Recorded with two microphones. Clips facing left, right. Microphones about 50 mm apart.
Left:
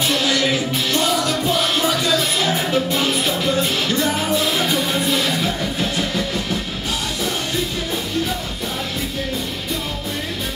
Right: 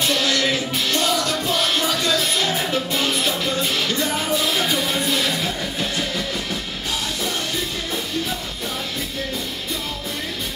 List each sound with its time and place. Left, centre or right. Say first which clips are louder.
0.0 s music: left 2 dB; centre